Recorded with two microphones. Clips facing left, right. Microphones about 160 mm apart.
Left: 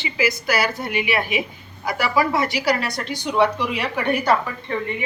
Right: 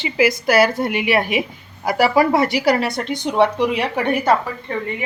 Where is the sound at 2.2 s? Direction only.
30° right (ahead or behind).